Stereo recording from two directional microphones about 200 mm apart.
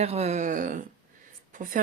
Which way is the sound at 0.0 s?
30° right (ahead or behind).